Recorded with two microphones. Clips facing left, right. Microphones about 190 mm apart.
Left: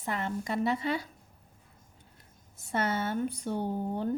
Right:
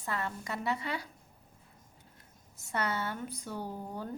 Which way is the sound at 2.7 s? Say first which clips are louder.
Left 4 dB; 25° left (ahead or behind).